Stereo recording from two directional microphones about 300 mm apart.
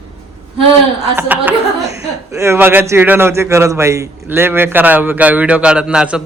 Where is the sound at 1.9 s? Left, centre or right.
Right.